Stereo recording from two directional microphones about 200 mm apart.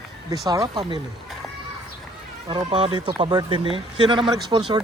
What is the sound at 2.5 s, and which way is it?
Speech, 25° right (ahead or behind).